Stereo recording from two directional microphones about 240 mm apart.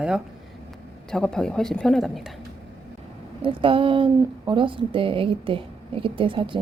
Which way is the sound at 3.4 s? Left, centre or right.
Right.